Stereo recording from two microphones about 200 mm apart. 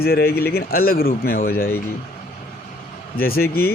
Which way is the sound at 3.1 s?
50° left (ahead or behind).